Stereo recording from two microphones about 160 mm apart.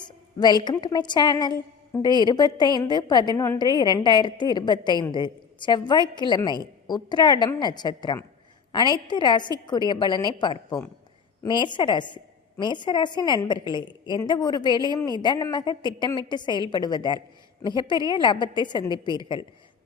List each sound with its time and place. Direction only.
0.0 s a woman's voice: 25° left (ahead or behind)